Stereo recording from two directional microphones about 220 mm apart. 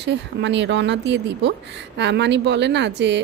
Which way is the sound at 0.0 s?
55° right (ahead or behind).